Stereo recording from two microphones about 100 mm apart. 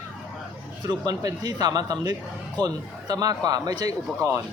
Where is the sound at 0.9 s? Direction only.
40° right (ahead or behind).